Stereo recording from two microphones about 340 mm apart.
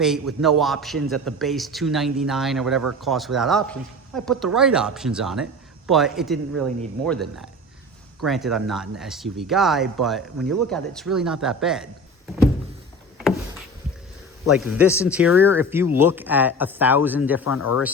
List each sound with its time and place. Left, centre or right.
0.0 s speech: centre
14.5 s speech: centre
17.4 s speech: left